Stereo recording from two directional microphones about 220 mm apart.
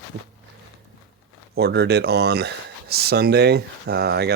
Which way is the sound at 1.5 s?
50° right (ahead or behind).